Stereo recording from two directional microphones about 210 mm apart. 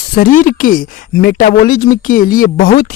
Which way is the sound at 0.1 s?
40° left (ahead or behind).